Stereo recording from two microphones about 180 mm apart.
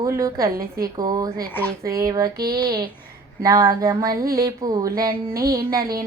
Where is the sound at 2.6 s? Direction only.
25° right (ahead or behind).